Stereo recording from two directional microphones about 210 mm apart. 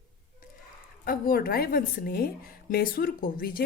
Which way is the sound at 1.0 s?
45° left (ahead or behind).